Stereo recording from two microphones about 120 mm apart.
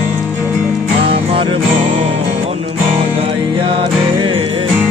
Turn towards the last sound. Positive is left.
turn(degrees=-45)  # may be behind; listen again after turning